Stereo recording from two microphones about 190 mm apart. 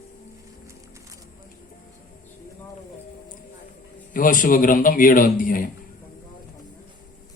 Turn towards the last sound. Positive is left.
turn(degrees=45)  # may be behind; listen again after turning